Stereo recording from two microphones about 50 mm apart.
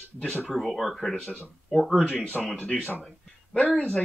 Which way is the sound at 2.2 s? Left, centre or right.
Left.